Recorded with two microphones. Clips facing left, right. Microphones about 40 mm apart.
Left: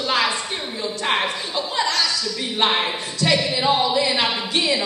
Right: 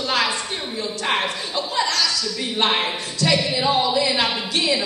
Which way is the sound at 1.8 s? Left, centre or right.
Centre.